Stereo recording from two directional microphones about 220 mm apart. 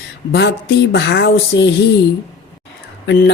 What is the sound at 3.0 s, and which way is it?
Speech, 50° left (ahead or behind).